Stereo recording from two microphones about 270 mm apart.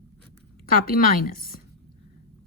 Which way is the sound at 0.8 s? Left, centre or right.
Left.